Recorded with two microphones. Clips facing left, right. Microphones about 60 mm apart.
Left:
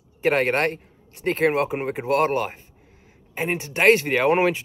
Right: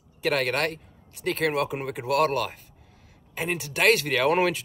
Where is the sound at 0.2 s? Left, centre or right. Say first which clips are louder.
Left 5 dB; left.